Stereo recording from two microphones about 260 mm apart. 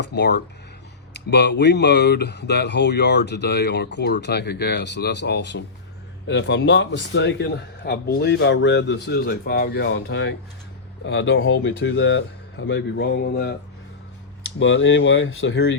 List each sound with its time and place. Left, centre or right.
0.0 s speech: left